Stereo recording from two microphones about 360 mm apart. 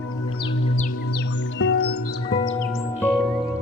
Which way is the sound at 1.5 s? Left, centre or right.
Left.